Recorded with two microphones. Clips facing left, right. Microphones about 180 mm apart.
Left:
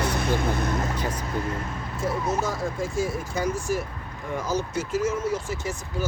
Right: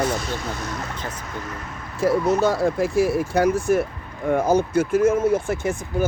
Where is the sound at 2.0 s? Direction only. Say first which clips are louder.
Right 8 dB; 70° right (ahead or behind); by 5.7 s 55° right (ahead or behind).